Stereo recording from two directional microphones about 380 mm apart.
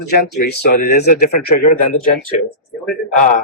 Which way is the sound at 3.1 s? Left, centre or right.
Left.